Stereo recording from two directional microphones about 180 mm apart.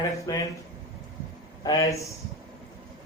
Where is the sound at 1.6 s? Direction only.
20° left (ahead or behind).